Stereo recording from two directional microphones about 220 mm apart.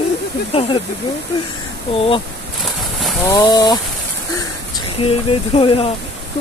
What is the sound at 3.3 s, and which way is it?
Speech, 15° left (ahead or behind).